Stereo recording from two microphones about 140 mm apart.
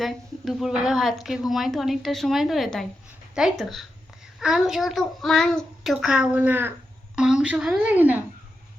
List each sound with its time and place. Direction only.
0.0 s a woman's voice: centre (ahead or behind)